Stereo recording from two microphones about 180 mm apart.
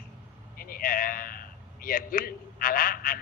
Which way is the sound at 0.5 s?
55° left (ahead or behind).